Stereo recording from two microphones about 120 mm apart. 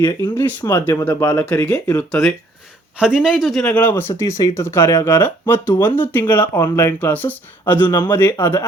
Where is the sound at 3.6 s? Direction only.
15° left (ahead or behind).